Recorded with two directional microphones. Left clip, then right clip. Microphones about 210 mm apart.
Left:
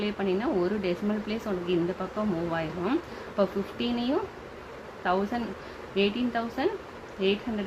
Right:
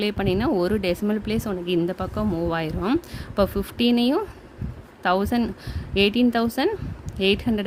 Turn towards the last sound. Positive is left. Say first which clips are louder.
# right 6 dB
turn(degrees=-60)  # may be behind; listen again after turning